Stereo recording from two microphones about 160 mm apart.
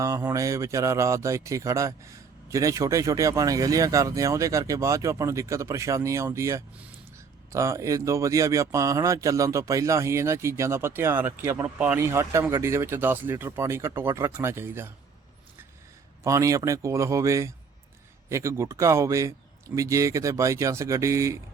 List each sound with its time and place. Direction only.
0.0 s speech: 20° right (ahead or behind)
16.2 s speech: 20° right (ahead or behind)